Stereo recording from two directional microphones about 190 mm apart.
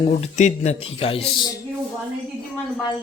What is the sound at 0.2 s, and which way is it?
Speech, 35° left (ahead or behind).